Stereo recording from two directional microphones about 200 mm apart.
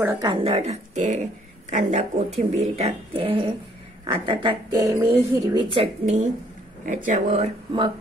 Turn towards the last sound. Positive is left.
turn(degrees=-30)  # may be behind; listen again after turning